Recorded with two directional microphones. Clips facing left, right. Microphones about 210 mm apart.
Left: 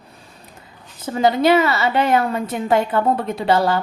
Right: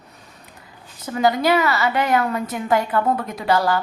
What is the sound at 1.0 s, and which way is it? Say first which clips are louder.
A woman's voice: left 3 dB; 25° left (ahead or behind).